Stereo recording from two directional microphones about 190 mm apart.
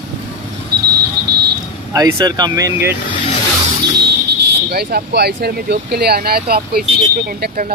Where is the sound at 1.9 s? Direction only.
15° right (ahead or behind).